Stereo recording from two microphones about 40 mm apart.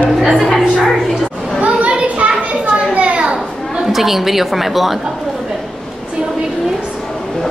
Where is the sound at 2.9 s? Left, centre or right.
Right.